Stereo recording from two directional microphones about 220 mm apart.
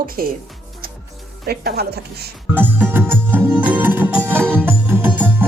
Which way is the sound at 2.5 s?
10° right (ahead or behind).